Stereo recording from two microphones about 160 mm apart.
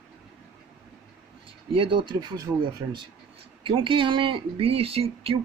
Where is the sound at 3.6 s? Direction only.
35° right (ahead or behind).